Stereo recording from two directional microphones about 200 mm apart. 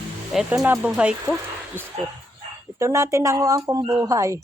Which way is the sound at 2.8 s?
15° right (ahead or behind).